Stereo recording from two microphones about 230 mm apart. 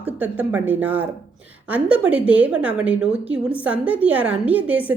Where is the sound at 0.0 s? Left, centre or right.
Centre.